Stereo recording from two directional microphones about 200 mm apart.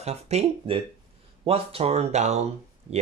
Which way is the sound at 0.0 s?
30° right (ahead or behind).